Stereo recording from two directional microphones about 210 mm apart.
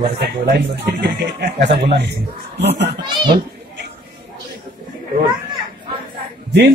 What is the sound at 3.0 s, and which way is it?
Children playing, 20° right (ahead or behind).